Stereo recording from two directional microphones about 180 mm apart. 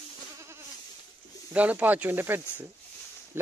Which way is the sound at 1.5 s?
10° right (ahead or behind).